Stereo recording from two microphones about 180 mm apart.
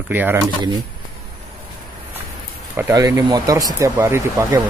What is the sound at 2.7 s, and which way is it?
Speech, 20° right (ahead or behind).